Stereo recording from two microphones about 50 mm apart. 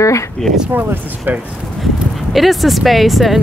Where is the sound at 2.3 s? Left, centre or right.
Centre.